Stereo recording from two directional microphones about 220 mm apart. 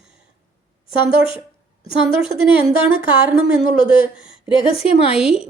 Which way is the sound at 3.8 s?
5° right (ahead or behind).